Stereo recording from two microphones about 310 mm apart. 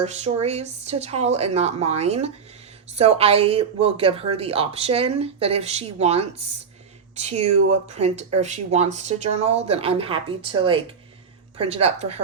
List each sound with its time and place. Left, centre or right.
0.0 s speech: right